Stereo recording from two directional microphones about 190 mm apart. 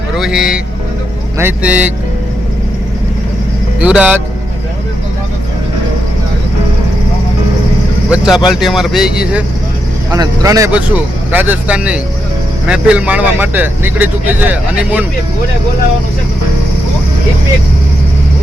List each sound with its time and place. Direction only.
0.2 s a man's voice: 5° right (ahead or behind)
3.8 s speech: 5° right (ahead or behind)
8.1 s speech: 5° right (ahead or behind)
10.1 s a man's voice: 15° right (ahead or behind)